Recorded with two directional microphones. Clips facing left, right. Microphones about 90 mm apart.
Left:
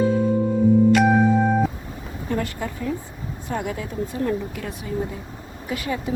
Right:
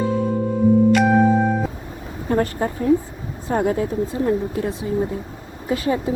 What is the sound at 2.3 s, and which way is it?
A woman's voice, 35° right (ahead or behind).